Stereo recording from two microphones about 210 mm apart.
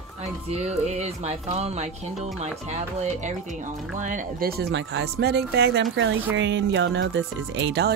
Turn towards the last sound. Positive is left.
turn(degrees=-55)  # may be behind; listen again after turning